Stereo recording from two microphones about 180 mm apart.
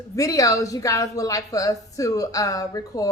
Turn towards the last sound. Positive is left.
turn(degrees=20)  # may be behind; listen again after turning